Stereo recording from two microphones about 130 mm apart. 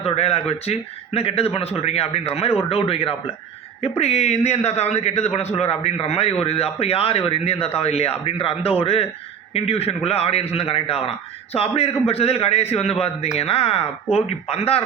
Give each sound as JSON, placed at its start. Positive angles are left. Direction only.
{"t": 0.0, "sound": "a man's voice", "side_deg": 50}